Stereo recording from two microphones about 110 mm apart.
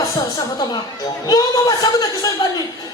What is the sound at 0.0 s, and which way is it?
Speech, 35° left (ahead or behind).